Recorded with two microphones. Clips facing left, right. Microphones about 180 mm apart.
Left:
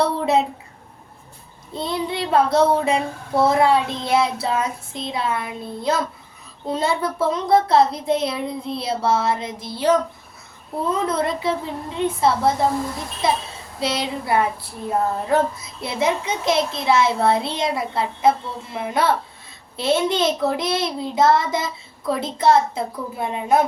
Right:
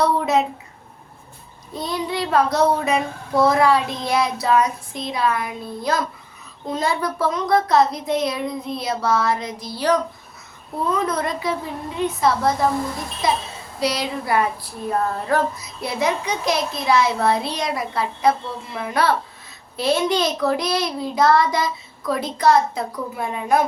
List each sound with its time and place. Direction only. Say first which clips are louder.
0.0 s a sound: even; 30° left (ahead or behind)
1.7 s child singing: even; 25° left (ahead or behind)
11.0 s child singing: left 2 dB; 25° left (ahead or behind)
13.7 s child singing: right 1 dB; 25° left (ahead or behind)